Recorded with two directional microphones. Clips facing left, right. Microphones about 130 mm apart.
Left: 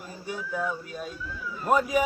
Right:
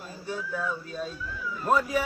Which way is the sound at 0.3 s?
15° left (ahead or behind).